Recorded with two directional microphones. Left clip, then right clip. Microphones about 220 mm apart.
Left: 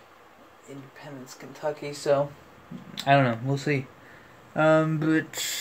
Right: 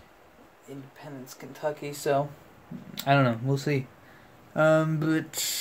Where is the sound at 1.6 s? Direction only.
15° right (ahead or behind).